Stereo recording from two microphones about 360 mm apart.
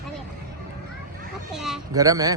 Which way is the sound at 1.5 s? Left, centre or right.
Centre.